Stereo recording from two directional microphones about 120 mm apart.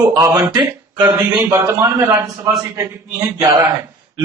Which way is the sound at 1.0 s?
25° right (ahead or behind).